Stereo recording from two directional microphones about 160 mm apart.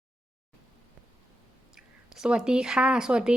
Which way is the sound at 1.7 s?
5° right (ahead or behind).